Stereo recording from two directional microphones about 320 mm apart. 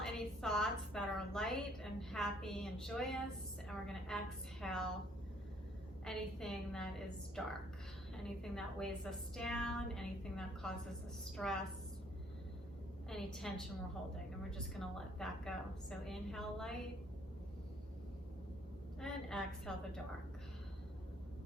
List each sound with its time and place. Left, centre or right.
0.0 s a woman's voice: centre
6.1 s a woman's voice: centre
13.1 s a woman's voice: centre
18.9 s a woman's voice: centre